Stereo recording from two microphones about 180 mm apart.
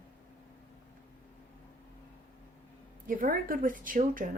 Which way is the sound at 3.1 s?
50° right (ahead or behind).